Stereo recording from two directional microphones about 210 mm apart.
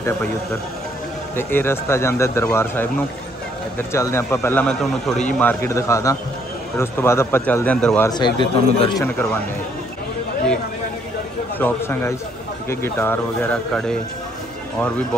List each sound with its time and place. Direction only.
1.3 s speech: 10° left (ahead or behind)
8.1 s speech: 20° left (ahead or behind)
11.5 s speech: 10° left (ahead or behind)